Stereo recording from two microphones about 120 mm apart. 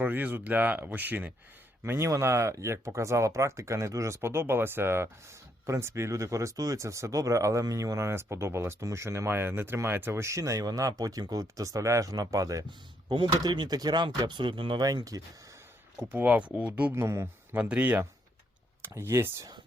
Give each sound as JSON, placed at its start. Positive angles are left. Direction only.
{"t": 0.0, "sound": "speech", "side_deg": -15}
{"t": 13.1, "sound": "speech", "side_deg": -40}
{"t": 16.0, "sound": "speech", "side_deg": -15}